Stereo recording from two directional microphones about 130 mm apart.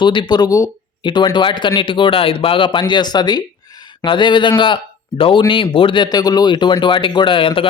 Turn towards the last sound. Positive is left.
turn(degrees=40)  # may be behind; listen again after turning